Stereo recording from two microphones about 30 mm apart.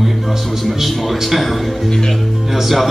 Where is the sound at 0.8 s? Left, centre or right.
Centre.